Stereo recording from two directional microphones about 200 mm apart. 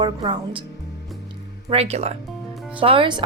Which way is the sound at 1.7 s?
30° right (ahead or behind).